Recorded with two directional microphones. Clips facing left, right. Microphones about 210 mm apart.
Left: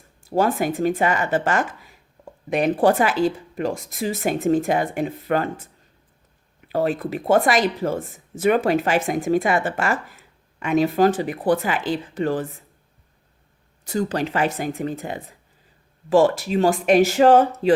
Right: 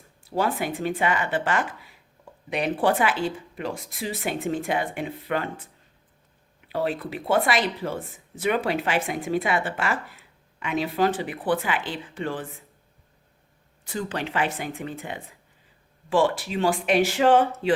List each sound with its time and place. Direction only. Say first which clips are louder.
0.3 s speech: left 5 dB; 45° left (ahead or behind)
6.7 s speech: left 5 dB; 45° left (ahead or behind)
13.8 s speech: left 7 dB; 40° left (ahead or behind)